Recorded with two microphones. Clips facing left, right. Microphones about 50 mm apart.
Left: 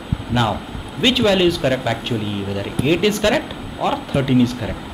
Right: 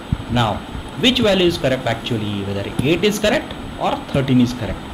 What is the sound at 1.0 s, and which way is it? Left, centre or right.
A man's voice, centre.